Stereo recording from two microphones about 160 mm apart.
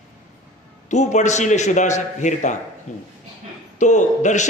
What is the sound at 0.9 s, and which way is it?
A man's voice, 50° left (ahead or behind).